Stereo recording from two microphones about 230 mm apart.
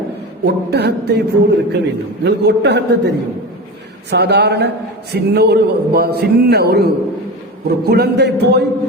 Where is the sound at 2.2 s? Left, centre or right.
Right.